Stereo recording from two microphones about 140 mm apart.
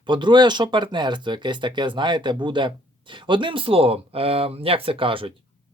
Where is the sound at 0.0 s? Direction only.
35° right (ahead or behind).